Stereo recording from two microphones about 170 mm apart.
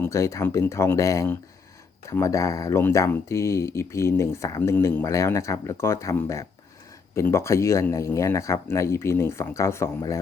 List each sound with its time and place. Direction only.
0.0 s speech: 15° left (ahead or behind)